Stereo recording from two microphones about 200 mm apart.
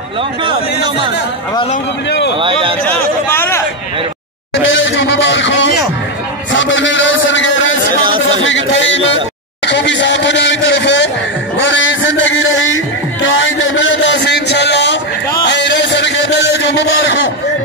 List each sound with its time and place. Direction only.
2.8 s chatter: 10° left (ahead or behind)
4.6 s a sound: 70° left (ahead or behind)
8.0 s chatter: 25° right (ahead or behind)
8.4 s a sound: 70° left (ahead or behind)
9.7 s speech: 60° left (ahead or behind)
11.5 s music: 70° left (ahead or behind)